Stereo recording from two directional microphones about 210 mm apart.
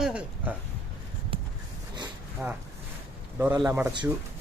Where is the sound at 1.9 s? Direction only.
20° right (ahead or behind).